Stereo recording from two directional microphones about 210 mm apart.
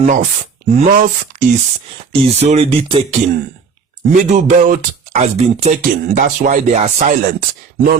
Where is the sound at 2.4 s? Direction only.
30° right (ahead or behind).